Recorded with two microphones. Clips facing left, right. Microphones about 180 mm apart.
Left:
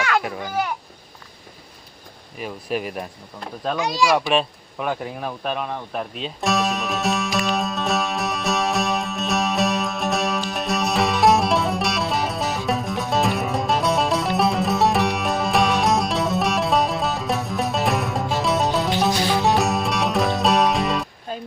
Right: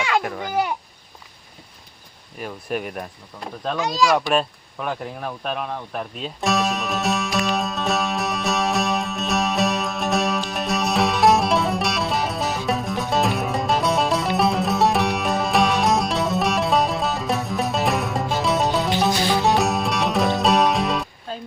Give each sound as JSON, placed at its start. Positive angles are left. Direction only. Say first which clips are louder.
{"t": 2.4, "sound": "speech", "louder": "left 1 dB", "side_deg": 5}
{"t": 3.8, "sound": "a child's voice", "louder": "right 1 dB", "side_deg": 15}
{"t": 4.0, "sound": "a sound", "louder": "even", "side_deg": 5}